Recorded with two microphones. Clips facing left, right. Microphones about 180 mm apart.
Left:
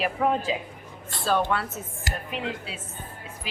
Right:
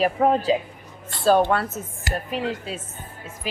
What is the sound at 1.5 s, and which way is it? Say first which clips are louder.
A woman's voice: right 4 dB; 45° right (ahead or behind).